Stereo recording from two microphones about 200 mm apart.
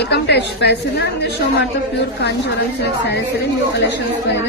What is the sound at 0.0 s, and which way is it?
Speech, 55° left (ahead or behind).